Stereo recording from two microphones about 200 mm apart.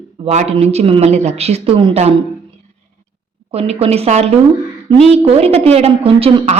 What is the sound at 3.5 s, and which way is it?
A woman's voice, 30° right (ahead or behind).